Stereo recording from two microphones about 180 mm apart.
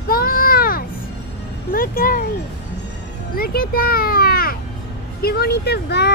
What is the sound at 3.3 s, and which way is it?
A child's voice, 55° left (ahead or behind).